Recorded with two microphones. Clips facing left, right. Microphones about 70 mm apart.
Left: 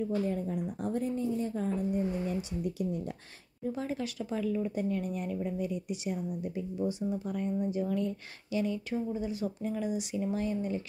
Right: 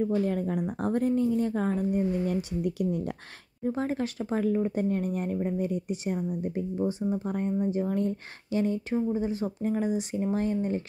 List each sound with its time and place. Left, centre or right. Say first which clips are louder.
0.0 s speech: right 5 dB; right
3.6 s speech: right 5 dB; right